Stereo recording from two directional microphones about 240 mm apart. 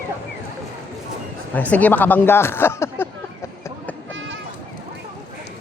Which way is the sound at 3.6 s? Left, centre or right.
Centre.